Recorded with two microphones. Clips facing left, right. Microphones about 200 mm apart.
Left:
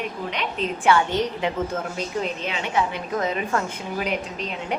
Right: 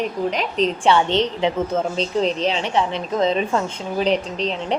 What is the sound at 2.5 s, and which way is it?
A woman's voice, 30° right (ahead or behind).